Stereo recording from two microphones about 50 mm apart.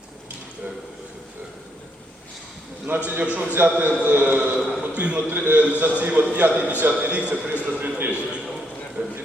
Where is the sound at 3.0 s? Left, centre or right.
Right.